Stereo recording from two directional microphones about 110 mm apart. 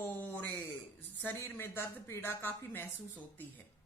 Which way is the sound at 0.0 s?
15° left (ahead or behind).